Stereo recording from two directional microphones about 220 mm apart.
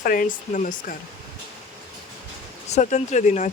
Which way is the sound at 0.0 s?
40° left (ahead or behind).